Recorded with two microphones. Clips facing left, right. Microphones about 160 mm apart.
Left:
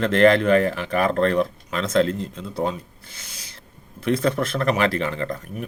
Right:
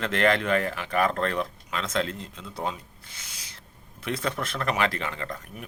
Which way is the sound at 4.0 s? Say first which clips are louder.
Left 9 dB; 35° left (ahead or behind).